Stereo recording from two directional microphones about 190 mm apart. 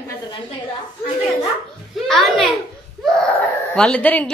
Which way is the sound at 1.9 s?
Centre (ahead or behind).